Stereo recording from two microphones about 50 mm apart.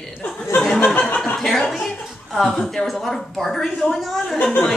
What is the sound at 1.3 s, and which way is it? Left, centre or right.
Speech, centre.